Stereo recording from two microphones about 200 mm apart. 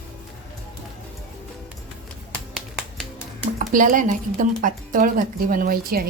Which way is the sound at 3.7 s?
40° right (ahead or behind).